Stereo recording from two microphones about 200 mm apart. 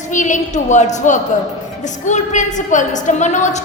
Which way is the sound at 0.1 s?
40° left (ahead or behind).